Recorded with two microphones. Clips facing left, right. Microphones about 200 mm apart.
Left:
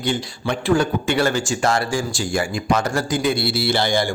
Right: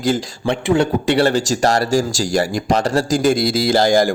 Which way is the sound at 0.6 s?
25° right (ahead or behind).